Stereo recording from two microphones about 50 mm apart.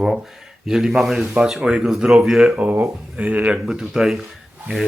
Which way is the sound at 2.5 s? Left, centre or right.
Right.